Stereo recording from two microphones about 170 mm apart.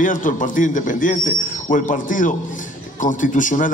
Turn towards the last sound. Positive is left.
turn(degrees=50)  # may be behind; listen again after turning